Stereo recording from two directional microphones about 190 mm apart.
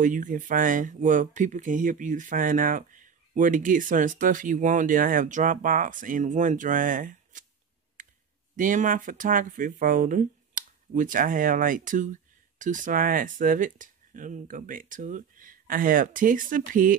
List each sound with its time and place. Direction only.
0.0 s speech: 45° right (ahead or behind)
8.0 s clicking: 45° right (ahead or behind)
8.5 s speech: 45° right (ahead or behind)